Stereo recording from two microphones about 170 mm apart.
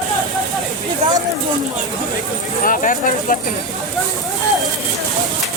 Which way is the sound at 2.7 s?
50° left (ahead or behind).